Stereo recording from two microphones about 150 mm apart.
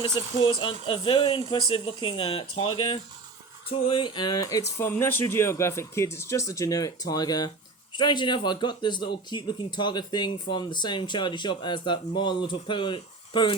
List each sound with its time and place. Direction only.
0.0 s a man's voice: 30° left (ahead or behind)